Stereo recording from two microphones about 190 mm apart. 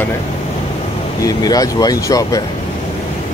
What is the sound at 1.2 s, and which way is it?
Speech, 20° left (ahead or behind).